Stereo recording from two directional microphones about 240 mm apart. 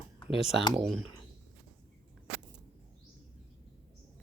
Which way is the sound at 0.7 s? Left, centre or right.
Centre.